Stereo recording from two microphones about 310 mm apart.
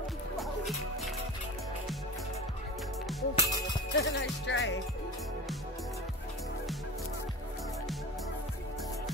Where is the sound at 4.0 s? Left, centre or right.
Left.